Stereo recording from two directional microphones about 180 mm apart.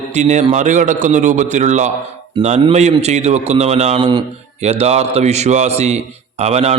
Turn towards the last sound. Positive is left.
turn(degrees=-35)  # may be behind; listen again after turning